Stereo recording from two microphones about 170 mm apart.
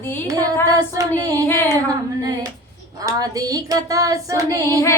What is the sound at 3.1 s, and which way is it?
Female singing, 20° right (ahead or behind).